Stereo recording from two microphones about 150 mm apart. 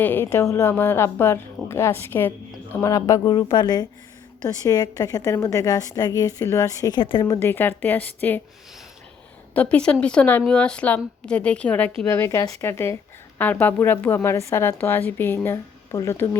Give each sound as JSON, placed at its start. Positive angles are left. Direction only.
{"t": 0.0, "sound": "a woman's voice", "side_deg": 15}
{"t": 9.6, "sound": "a woman's voice", "side_deg": 10}